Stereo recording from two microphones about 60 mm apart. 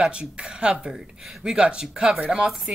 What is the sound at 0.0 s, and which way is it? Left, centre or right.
Speech, centre.